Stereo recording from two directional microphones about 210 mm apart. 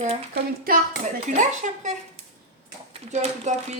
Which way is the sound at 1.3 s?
35° right (ahead or behind).